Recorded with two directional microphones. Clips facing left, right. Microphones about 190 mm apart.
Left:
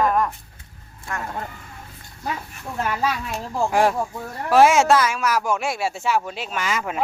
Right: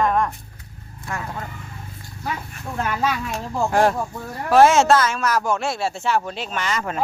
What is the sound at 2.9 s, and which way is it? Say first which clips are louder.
A man's voice: right 1 dB; centre (ahead or behind).